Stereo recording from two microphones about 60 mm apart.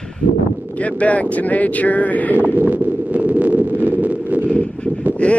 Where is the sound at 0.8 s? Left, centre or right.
Left.